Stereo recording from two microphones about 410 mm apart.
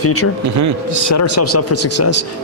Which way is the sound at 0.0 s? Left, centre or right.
Left.